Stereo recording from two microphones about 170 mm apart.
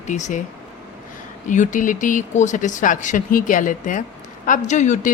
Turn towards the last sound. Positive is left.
turn(degrees=45)  # may be behind; listen again after turning